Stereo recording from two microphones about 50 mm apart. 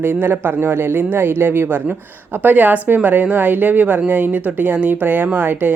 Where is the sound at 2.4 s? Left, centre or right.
Right.